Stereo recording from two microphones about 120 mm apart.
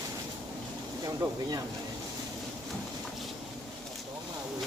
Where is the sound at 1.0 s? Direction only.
30° right (ahead or behind).